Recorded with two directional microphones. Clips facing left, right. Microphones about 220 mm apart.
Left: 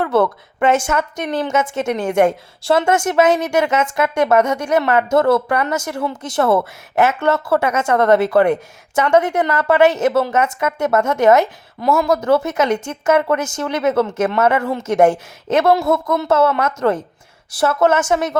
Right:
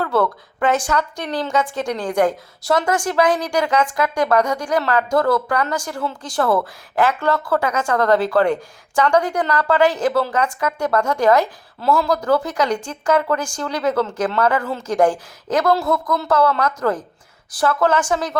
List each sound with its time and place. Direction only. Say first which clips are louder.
0.0 s a woman's voice: left 3 dB; 20° left (ahead or behind)